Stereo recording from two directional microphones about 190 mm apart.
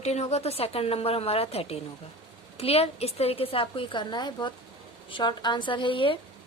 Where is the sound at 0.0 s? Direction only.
35° left (ahead or behind).